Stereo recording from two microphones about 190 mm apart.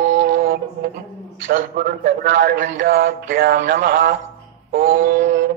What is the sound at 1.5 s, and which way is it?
A man's voice, 45° right (ahead or behind).